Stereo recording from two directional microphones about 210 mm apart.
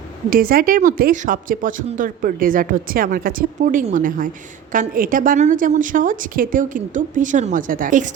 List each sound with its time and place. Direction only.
0.3 s speech: 45° right (ahead or behind)